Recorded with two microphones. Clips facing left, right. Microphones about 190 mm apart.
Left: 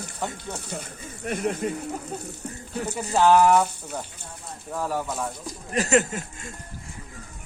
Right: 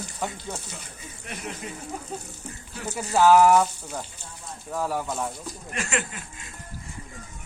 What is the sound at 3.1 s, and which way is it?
Speech, 5° right (ahead or behind).